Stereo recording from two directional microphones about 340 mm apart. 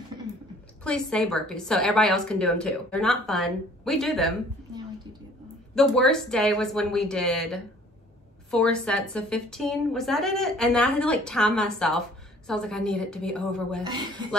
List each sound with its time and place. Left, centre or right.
0.8 s a woman's voice: centre
5.8 s a woman's voice: centre